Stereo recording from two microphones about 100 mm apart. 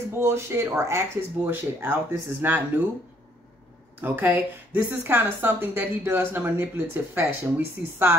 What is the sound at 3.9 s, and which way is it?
Speech, 20° right (ahead or behind).